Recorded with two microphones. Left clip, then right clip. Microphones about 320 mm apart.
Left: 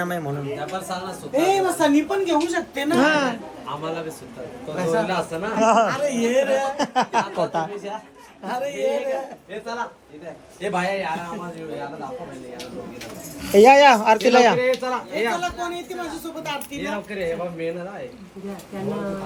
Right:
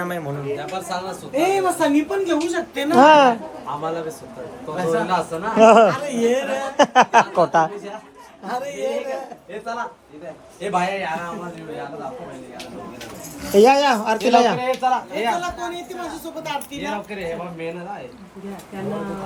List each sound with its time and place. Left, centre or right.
0.0 s speech: centre
6.7 s speech: right
8.4 s speech: centre
10.6 s speech: centre
13.4 s speech: centre